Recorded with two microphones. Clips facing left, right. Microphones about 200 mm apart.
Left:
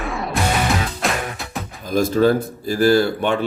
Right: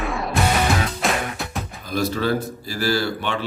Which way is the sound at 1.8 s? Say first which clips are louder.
Left 7 dB; 50° left (ahead or behind).